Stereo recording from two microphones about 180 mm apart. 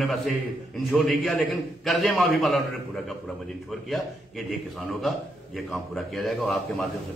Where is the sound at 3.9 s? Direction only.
Centre (ahead or behind).